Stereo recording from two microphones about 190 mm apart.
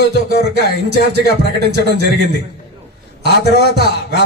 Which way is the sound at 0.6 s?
60° right (ahead or behind).